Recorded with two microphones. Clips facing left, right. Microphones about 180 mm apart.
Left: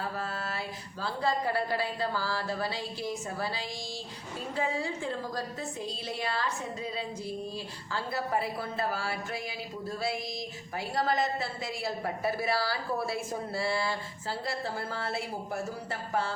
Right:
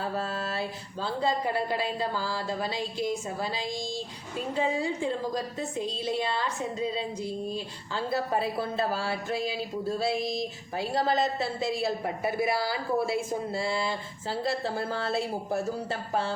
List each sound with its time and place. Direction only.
0.0 s a woman's voice: 25° right (ahead or behind)